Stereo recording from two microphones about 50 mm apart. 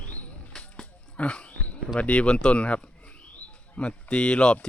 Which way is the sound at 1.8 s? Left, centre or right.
Centre.